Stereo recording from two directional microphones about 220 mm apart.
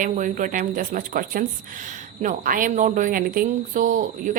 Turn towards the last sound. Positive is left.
turn(degrees=-35)  # may be behind; listen again after turning